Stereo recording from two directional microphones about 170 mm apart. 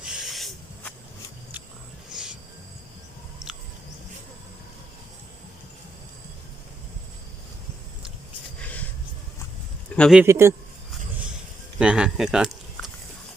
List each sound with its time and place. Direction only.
0.0 s hiss: centre (ahead or behind)
9.9 s a man's voice: 5° left (ahead or behind)
10.2 s a man's voice: 15° right (ahead or behind)
11.8 s speech: 5° right (ahead or behind)